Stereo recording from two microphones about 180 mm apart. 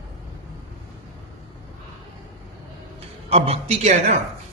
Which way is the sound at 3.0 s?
35° right (ahead or behind).